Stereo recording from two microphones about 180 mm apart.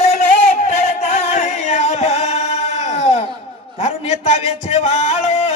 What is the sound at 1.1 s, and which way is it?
Music, 35° left (ahead or behind).